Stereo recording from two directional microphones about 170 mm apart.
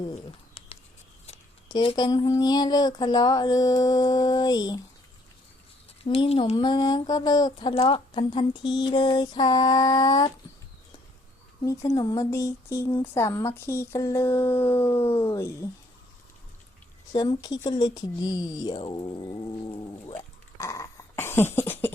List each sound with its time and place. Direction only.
0.0 s a sound: 30° left (ahead or behind)
1.6 s speech: 25° left (ahead or behind)
6.1 s speech: 35° left (ahead or behind)
11.6 s speech: 20° left (ahead or behind)
17.1 s speech: 25° left (ahead or behind)
20.6 s dog: 15° left (ahead or behind)